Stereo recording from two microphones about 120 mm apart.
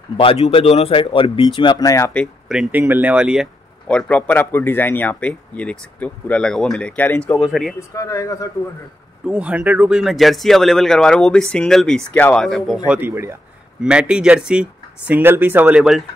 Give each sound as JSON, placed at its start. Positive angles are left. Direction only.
{"t": 0.2, "sound": "speech", "side_deg": 50}
{"t": 2.4, "sound": "speech", "side_deg": -5}
{"t": 3.8, "sound": "speech", "side_deg": 10}
{"t": 7.9, "sound": "speech", "side_deg": 25}
{"t": 9.2, "sound": "speech", "side_deg": -10}
{"t": 12.1, "sound": "speech", "side_deg": 15}
{"t": 12.4, "sound": "speech", "side_deg": 0}
{"t": 13.1, "sound": "a man's voice", "side_deg": -20}
{"t": 13.7, "sound": "speech", "side_deg": -10}